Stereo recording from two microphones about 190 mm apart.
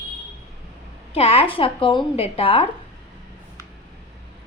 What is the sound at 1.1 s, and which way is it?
A woman's voice, 30° left (ahead or behind).